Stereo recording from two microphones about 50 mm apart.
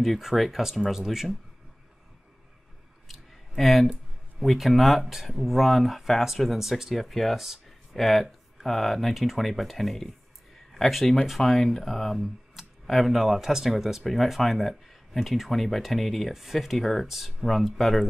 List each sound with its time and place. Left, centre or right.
0.0 s speech: centre
3.1 s a sound: centre
4.4 s speech: centre